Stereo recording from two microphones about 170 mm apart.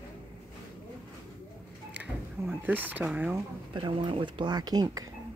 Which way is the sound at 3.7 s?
30° right (ahead or behind).